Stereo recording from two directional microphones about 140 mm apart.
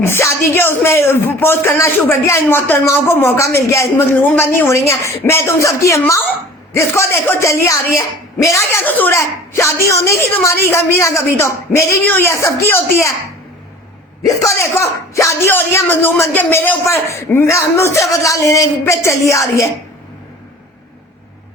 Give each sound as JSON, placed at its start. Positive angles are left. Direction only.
{"t": 0.0, "sound": "a man's voice", "side_deg": 20}
{"t": 14.6, "sound": "speech", "side_deg": 20}